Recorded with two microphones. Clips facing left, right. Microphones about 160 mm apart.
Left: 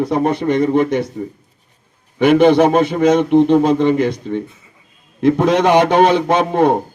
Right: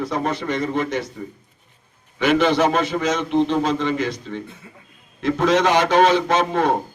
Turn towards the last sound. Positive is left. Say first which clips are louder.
# left 5 dB
turn(degrees=55)  # may be behind; listen again after turning